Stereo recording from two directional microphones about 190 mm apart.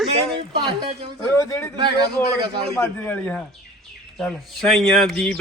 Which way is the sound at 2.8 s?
10° left (ahead or behind).